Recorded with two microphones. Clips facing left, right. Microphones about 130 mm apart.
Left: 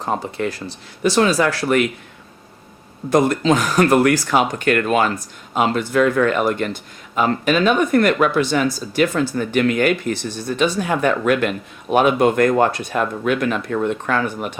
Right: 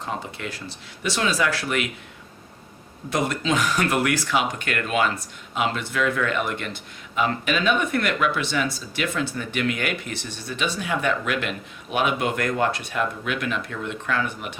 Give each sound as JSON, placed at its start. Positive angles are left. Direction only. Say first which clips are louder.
{"t": 0.0, "sound": "speech", "louder": "left 9 dB", "side_deg": 45}
{"t": 3.1, "sound": "speech", "louder": "left 8 dB", "side_deg": 40}